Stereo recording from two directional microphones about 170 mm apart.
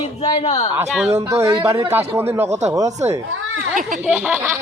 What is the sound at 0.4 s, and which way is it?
Speech, 40° left (ahead or behind).